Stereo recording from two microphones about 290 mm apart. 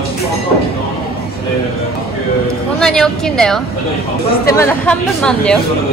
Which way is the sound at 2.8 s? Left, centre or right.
Centre.